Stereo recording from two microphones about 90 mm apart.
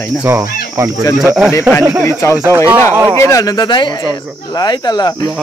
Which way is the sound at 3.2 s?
40° left (ahead or behind).